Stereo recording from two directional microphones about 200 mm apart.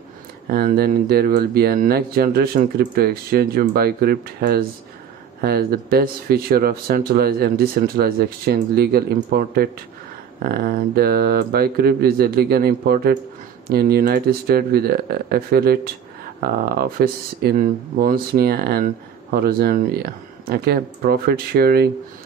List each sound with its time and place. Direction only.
0.5 s speech: 50° right (ahead or behind)